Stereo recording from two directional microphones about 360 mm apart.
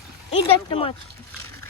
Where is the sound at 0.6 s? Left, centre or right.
Centre.